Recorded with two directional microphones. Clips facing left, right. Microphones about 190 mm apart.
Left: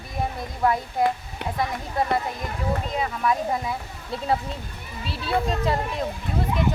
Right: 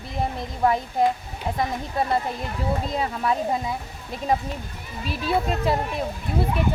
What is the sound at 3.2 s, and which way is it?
Speech, 30° right (ahead or behind).